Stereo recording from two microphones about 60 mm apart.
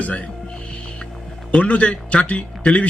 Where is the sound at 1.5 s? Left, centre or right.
Left.